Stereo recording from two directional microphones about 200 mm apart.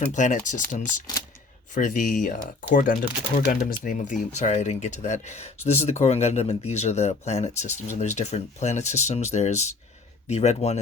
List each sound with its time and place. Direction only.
0.0 s speech: 40° left (ahead or behind)
1.7 s speech: 40° left (ahead or behind)